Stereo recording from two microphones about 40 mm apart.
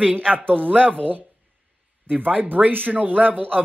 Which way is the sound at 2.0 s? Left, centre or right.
Right.